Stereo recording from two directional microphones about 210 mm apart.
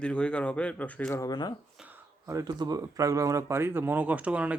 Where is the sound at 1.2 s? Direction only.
20° left (ahead or behind).